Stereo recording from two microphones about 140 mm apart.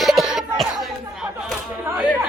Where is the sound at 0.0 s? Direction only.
Centre (ahead or behind).